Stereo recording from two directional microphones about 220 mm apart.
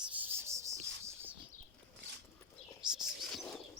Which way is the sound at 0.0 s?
10° right (ahead or behind).